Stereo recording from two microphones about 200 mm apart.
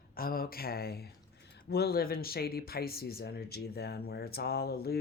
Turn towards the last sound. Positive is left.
turn(degrees=50)  # may be behind; listen again after turning